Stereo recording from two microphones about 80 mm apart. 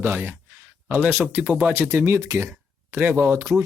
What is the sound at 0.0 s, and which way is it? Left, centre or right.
Speech, right.